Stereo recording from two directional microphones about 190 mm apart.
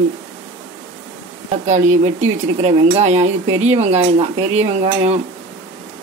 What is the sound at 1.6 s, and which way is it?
Speech, 40° right (ahead or behind).